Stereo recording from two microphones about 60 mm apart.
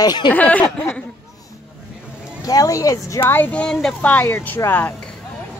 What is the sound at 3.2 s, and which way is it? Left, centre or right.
Speech, left.